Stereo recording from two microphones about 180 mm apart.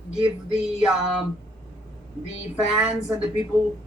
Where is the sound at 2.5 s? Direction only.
5° right (ahead or behind).